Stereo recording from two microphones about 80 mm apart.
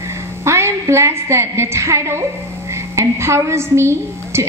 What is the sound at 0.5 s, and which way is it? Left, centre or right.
A woman's voice, right.